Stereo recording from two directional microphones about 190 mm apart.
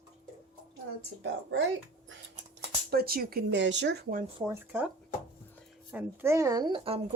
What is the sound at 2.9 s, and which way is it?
Speech, 50° right (ahead or behind).